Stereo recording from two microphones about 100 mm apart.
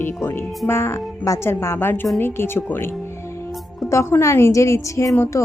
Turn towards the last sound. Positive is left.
turn(degrees=30)  # may be behind; listen again after turning